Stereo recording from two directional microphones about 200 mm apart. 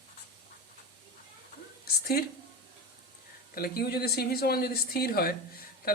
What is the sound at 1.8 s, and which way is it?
Speech, 50° left (ahead or behind).